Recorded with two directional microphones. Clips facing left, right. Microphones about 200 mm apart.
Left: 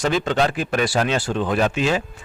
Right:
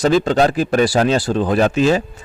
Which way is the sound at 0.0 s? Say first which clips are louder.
Right 6 dB; 35° right (ahead or behind).